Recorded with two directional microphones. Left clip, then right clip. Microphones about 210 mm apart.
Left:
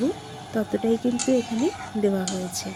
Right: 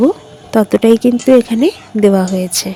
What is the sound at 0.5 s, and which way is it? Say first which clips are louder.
A woman's voice: right 15 dB; 45° right (ahead or behind).